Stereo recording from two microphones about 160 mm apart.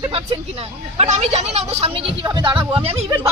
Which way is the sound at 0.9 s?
45° right (ahead or behind).